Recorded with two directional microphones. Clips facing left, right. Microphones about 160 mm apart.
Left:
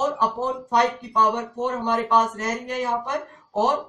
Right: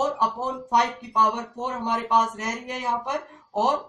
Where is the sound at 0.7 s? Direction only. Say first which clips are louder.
Left 1 dB; 10° right (ahead or behind).